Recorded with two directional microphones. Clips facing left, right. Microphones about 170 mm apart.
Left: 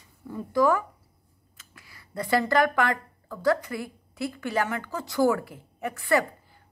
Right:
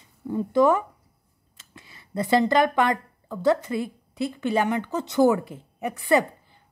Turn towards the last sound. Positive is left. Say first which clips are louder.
# right 3 dB
turn(degrees=-20)  # may be behind; listen again after turning